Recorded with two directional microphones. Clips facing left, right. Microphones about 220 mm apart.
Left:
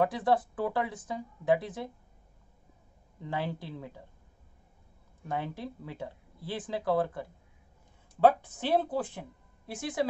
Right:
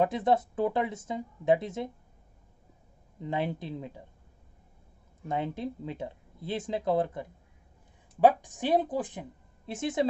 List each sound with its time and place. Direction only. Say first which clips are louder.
0.0 s speech: right 1 dB; 20° right (ahead or behind)
3.2 s speech: right 3 dB; 20° right (ahead or behind)
5.3 s a woman's voice: right 3 dB; 20° right (ahead or behind)